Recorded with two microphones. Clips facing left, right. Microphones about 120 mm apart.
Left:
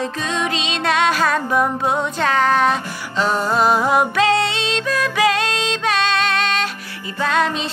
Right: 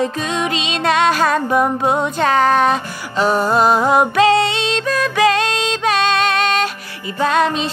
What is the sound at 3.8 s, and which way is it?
Female singing, centre (ahead or behind).